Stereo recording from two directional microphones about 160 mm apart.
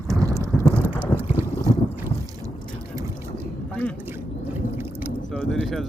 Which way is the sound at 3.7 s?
10° left (ahead or behind).